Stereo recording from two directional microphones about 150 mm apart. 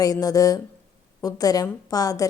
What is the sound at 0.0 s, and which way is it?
A woman's voice, 25° left (ahead or behind).